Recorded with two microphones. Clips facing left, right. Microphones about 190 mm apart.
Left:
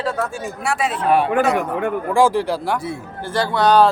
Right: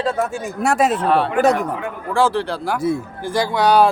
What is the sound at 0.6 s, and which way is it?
Speech, 45° right (ahead or behind).